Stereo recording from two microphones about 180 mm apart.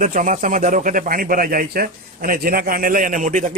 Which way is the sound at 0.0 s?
45° right (ahead or behind).